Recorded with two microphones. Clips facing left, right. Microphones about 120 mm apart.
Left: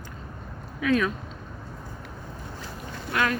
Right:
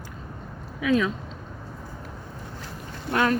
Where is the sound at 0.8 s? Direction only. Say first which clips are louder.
Right 1 dB; 15° right (ahead or behind).